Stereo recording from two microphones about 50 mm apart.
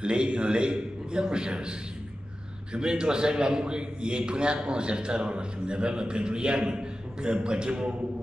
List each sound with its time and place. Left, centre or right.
0.0 s a man's voice: centre